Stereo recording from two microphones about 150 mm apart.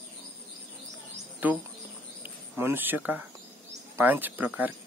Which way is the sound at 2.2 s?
15° right (ahead or behind).